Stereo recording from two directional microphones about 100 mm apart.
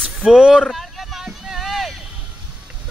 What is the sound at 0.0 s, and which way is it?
Vehicle, 5° right (ahead or behind).